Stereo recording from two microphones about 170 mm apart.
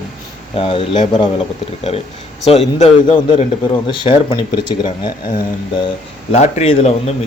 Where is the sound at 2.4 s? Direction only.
40° left (ahead or behind).